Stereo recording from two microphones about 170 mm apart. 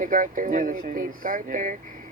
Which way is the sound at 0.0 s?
50° right (ahead or behind).